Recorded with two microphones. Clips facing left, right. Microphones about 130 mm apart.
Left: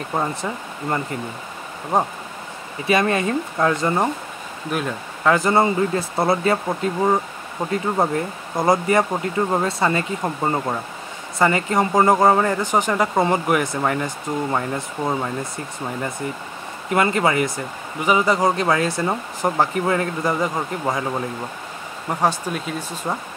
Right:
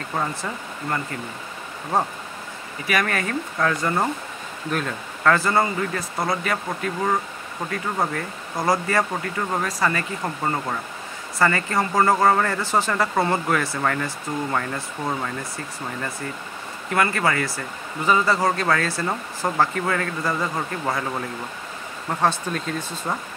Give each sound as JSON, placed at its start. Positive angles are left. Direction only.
{"t": 0.1, "sound": "speech", "side_deg": 20}
{"t": 22.2, "sound": "speech", "side_deg": 10}